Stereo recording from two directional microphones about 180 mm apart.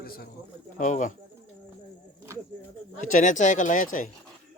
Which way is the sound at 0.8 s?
45° left (ahead or behind).